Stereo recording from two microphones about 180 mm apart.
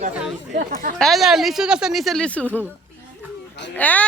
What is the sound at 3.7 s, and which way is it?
Speech, 10° left (ahead or behind).